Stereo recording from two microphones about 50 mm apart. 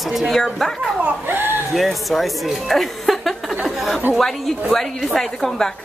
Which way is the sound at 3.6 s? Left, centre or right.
Centre.